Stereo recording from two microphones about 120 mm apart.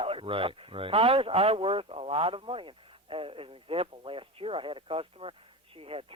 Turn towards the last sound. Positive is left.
turn(degrees=-50)  # may be behind; listen again after turning